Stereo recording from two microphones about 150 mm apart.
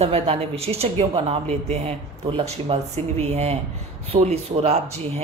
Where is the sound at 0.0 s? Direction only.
40° right (ahead or behind).